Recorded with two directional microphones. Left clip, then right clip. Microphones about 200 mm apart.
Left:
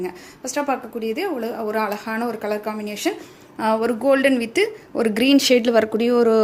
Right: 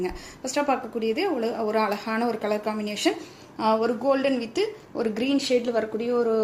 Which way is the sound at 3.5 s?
25° left (ahead or behind).